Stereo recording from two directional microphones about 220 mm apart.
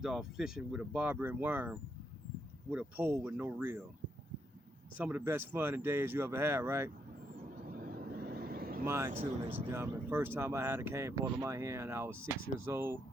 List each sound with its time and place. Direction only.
0.0 s speech: centre (ahead or behind)
4.9 s speech: 10° right (ahead or behind)
7.7 s vehicle: 40° right (ahead or behind)
8.8 s speech: 10° right (ahead or behind)
9.2 s speech: 25° right (ahead or behind)
9.6 s speech: 10° right (ahead or behind)